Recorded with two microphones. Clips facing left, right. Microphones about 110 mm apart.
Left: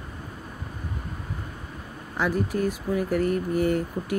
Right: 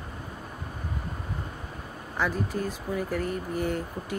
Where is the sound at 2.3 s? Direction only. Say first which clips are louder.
Left 5 dB; 75° left (ahead or behind).